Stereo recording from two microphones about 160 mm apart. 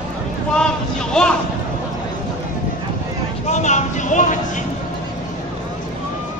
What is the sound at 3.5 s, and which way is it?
Speech, 45° left (ahead or behind).